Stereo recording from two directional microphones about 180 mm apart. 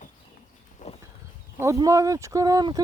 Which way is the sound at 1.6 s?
20° right (ahead or behind).